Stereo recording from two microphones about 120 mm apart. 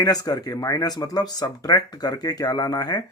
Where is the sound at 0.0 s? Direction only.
30° left (ahead or behind).